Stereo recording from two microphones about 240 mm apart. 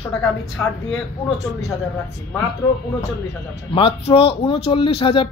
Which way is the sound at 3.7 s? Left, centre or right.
Left.